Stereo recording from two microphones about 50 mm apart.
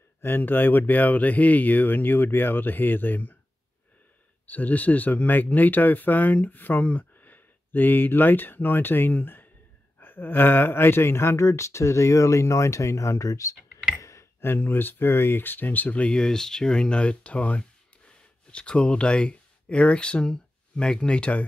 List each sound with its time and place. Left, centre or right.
0.2 s speech: left
4.5 s speech: left
14.4 s speech: left
16.1 s speech: centre